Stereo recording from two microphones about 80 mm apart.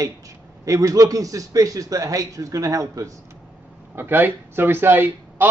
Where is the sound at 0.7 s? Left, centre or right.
Right.